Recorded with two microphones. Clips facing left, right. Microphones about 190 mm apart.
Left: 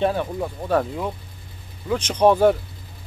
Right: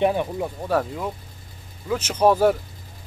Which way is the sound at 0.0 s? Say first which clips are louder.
Right 1 dB; 15° right (ahead or behind).